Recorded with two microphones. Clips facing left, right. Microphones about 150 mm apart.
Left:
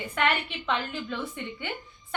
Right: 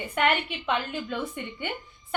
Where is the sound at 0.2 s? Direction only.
15° right (ahead or behind).